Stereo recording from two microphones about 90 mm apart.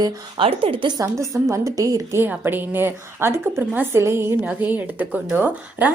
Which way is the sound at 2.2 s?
20° right (ahead or behind).